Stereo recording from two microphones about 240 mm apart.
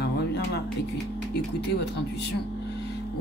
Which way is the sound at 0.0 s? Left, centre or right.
Left.